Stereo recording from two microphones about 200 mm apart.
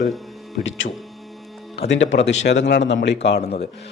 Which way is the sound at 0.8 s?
45° left (ahead or behind).